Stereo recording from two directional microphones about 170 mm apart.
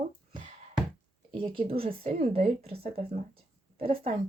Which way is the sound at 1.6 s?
35° right (ahead or behind).